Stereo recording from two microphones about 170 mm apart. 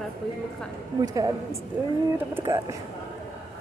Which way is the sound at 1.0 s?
20° right (ahead or behind).